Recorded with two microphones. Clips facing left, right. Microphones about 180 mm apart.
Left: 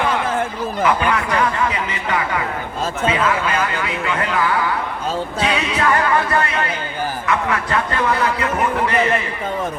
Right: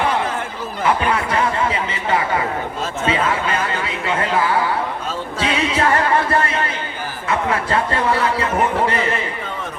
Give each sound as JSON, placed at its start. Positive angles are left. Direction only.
{"t": 0.9, "sound": "speech", "side_deg": -30}